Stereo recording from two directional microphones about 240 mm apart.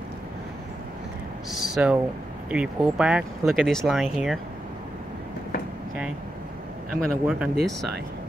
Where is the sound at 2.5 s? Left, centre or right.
Centre.